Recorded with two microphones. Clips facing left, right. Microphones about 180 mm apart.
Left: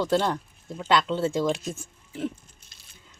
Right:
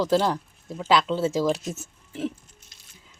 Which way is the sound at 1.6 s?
25° right (ahead or behind).